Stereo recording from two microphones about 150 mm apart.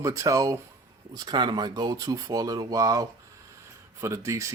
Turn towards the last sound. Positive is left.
turn(degrees=-20)  # may be behind; listen again after turning